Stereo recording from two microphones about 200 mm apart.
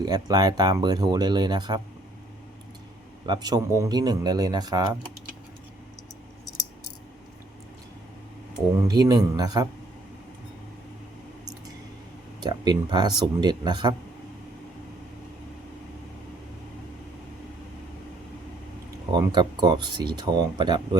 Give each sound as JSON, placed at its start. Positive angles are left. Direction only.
{"t": 0.0, "sound": "speech", "side_deg": -20}
{"t": 3.2, "sound": "speech", "side_deg": -20}
{"t": 8.9, "sound": "speech", "side_deg": -20}
{"t": 12.4, "sound": "speech", "side_deg": -20}
{"t": 19.1, "sound": "speech", "side_deg": -20}